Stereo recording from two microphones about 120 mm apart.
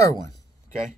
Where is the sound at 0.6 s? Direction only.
90° right.